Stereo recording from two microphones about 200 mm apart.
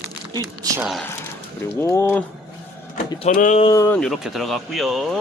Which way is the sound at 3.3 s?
40° left (ahead or behind).